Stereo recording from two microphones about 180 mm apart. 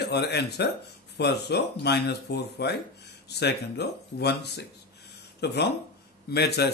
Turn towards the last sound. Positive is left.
turn(degrees=65)  # may be behind; listen again after turning